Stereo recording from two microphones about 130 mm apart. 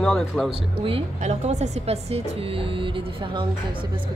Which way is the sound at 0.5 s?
45° right (ahead or behind).